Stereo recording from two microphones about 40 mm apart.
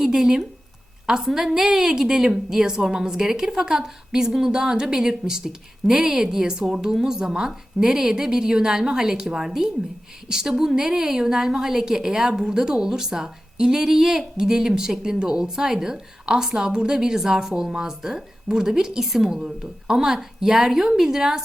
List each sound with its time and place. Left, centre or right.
0.0 s a woman's voice: centre